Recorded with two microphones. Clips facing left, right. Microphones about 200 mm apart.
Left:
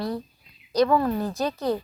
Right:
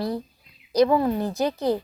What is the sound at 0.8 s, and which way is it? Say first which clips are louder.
Speech: right 1 dB; 20° right (ahead or behind).